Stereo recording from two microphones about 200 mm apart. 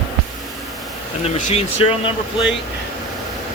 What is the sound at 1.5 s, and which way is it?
Speech, 30° left (ahead or behind).